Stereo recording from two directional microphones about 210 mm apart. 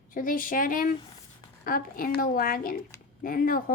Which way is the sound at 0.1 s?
40° left (ahead or behind).